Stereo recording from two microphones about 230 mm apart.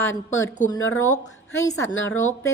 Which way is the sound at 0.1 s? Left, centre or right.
Left.